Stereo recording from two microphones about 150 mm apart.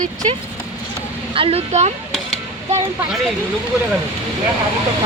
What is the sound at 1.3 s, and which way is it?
Speech, 40° right (ahead or behind).